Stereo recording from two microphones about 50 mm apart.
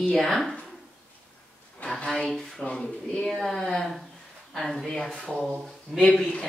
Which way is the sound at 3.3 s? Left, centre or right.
Centre.